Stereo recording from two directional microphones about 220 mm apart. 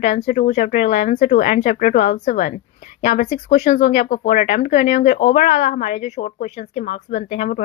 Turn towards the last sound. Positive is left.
turn(degrees=35)  # may be behind; listen again after turning